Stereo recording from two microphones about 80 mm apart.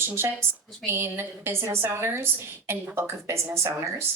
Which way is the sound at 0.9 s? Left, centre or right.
Right.